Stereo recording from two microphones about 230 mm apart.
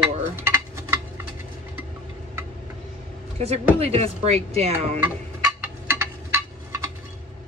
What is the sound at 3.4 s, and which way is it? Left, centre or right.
Speech, right.